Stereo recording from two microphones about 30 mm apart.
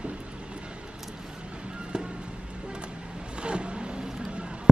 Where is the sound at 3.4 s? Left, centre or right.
Right.